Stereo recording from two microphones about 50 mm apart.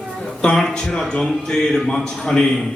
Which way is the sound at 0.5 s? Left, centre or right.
Centre.